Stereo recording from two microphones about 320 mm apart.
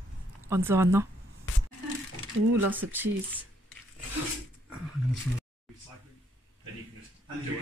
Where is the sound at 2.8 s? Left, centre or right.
Right.